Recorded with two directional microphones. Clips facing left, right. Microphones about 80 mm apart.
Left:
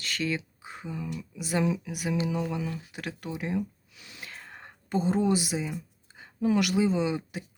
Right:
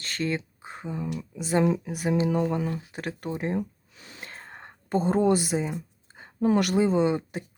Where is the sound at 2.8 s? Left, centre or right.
Right.